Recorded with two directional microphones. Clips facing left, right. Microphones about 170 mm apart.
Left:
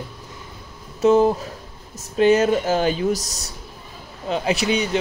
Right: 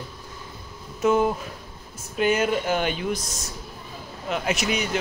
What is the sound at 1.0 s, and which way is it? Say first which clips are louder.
Speech: left 5 dB; 35° left (ahead or behind).